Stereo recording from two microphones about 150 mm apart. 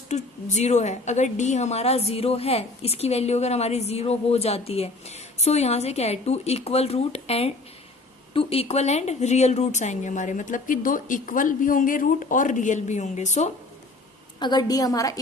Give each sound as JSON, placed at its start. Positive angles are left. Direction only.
{"t": 0.1, "sound": "a woman's voice", "side_deg": 50}
{"t": 14.3, "sound": "a woman's voice", "side_deg": 30}